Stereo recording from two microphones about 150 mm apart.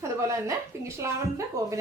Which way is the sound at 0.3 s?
20° right (ahead or behind).